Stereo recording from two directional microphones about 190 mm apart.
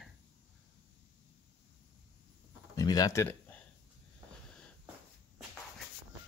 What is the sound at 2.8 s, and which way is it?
Speech, 20° left (ahead or behind).